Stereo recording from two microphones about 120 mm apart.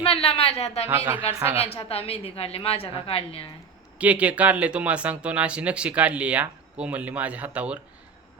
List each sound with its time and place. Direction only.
0.0 s a woman's voice: 55° left (ahead or behind)
0.9 s speech: 15° right (ahead or behind)
1.5 s a woman's voice: 55° left (ahead or behind)
3.9 s speech: 10° right (ahead or behind)